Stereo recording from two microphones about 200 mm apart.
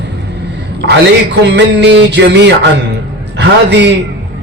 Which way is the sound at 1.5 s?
60° right (ahead or behind).